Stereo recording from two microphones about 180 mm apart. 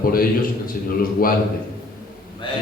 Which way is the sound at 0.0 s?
55° left (ahead or behind).